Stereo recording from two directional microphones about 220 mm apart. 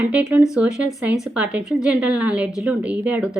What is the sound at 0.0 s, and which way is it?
Speech, 5° right (ahead or behind).